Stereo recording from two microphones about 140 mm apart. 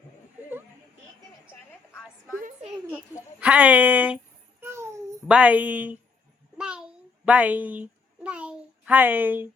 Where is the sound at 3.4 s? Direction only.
10° right (ahead or behind).